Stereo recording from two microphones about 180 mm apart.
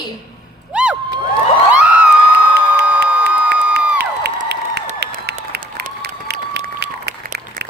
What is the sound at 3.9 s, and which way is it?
Crowd, 65° right (ahead or behind).